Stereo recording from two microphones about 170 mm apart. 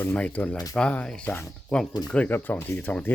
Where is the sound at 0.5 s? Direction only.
20° left (ahead or behind).